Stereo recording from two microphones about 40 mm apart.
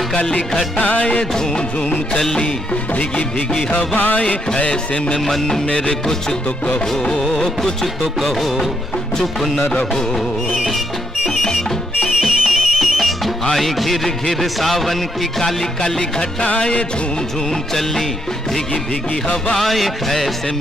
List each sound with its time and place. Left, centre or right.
0.1 s music: left
0.7 s music: left
1.3 s music: centre
2.7 s music: left
4.6 s music: left; by 8.6 s centre
9.9 s music: centre
12.2 s music: centre
16.4 s music: left
17.5 s music: centre
19.5 s music: centre